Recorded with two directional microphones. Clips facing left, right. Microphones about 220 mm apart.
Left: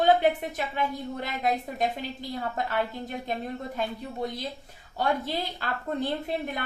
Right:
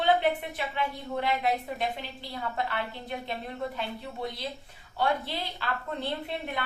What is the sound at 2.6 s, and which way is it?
A woman's voice, 45° left (ahead or behind).